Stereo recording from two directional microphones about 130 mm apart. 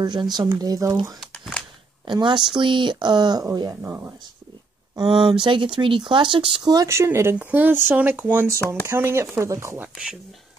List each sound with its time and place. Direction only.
0.0 s speech: 30° right (ahead or behind)
1.3 s a sound: 10° left (ahead or behind)
2.0 s speech: 35° right (ahead or behind)
3.8 s speech: 20° right (ahead or behind)
4.9 s speech: 40° right (ahead or behind); by 9.8 s 20° right (ahead or behind)